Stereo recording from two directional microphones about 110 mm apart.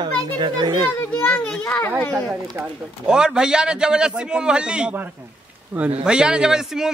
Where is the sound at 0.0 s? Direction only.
45° right (ahead or behind).